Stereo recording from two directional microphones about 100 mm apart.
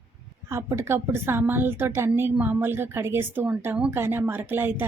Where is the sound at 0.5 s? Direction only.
25° right (ahead or behind).